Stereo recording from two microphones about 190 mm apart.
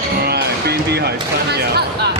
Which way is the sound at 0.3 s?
55° right (ahead or behind).